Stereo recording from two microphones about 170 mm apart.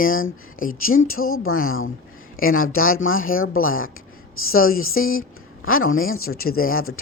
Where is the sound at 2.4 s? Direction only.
60° left (ahead or behind).